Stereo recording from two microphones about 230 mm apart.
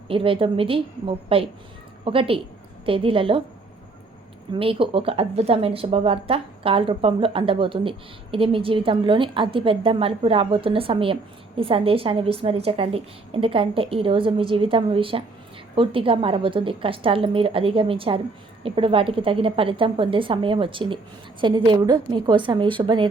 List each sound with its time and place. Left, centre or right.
0.1 s speech: right
4.5 s speech: right